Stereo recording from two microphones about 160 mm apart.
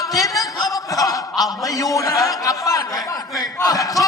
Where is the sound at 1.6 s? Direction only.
20° left (ahead or behind).